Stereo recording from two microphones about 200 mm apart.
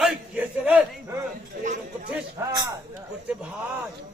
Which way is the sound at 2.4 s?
15° right (ahead or behind).